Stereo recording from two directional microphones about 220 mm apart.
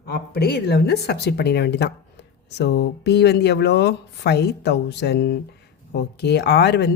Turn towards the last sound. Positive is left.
turn(degrees=50)  # may be behind; listen again after turning